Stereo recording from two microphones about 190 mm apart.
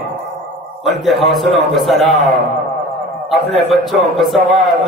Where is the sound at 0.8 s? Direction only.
Centre (ahead or behind).